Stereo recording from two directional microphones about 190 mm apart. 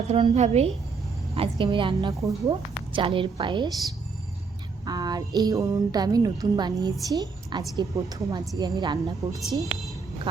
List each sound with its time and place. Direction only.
0.1 s a woman's voice: 35° right (ahead or behind)
4.9 s a woman's voice: 20° right (ahead or behind)